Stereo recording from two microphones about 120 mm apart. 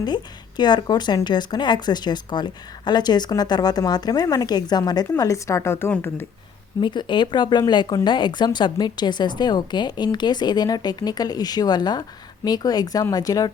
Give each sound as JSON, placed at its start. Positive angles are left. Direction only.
{"t": 0.0, "sound": "speech", "side_deg": 35}
{"t": 6.8, "sound": "speech", "side_deg": 40}